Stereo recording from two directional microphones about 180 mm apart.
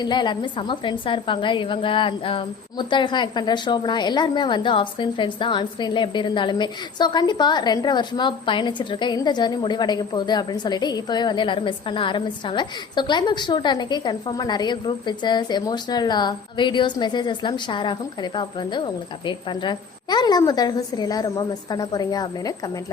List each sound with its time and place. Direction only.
0.0 s a woman's voice: 25° left (ahead or behind)